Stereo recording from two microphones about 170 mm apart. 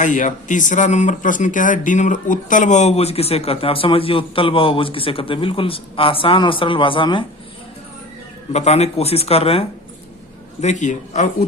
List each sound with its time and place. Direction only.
0.0 s speech: 45° left (ahead or behind); by 7.3 s 30° left (ahead or behind)
8.5 s speech: 40° left (ahead or behind)